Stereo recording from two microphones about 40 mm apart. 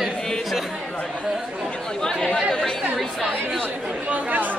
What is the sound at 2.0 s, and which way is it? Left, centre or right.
Speech, centre.